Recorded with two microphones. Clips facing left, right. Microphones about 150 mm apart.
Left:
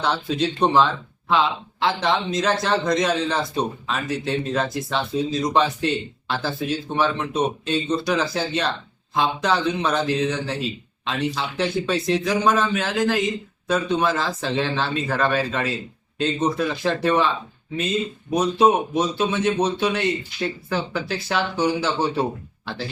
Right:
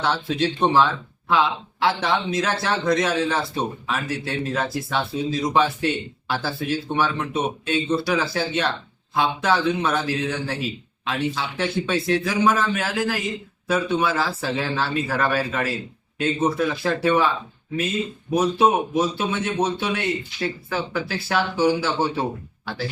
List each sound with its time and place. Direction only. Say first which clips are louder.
0.0 s speech: even; centre (ahead or behind)